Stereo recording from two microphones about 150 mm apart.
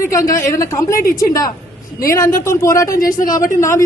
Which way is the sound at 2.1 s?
20° left (ahead or behind).